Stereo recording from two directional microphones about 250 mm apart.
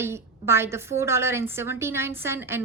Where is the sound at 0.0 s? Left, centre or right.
Centre.